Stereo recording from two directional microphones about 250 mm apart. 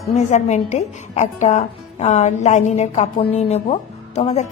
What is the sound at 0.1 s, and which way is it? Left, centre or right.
A woman's voice, left.